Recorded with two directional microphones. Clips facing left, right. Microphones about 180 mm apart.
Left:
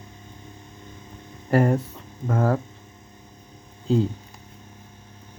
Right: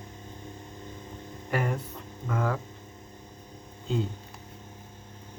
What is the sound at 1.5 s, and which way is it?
Speech, 45° left (ahead or behind).